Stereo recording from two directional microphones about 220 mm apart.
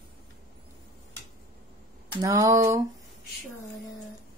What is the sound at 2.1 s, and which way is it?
Speech, 15° right (ahead or behind).